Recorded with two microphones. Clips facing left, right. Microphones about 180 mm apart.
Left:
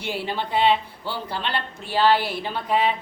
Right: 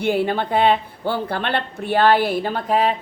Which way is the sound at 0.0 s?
55° right (ahead or behind).